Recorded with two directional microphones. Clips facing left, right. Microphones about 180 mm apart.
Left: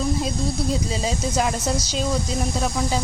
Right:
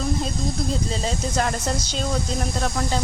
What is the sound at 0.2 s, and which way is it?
Speech, 10° left (ahead or behind).